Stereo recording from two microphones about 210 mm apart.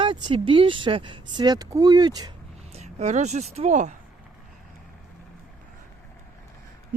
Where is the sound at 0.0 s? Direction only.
20° right (ahead or behind).